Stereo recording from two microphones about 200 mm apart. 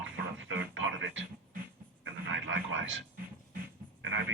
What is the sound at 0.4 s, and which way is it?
Radio, 70° right (ahead or behind).